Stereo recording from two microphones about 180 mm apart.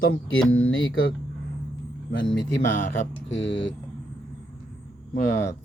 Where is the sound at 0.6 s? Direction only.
90° left.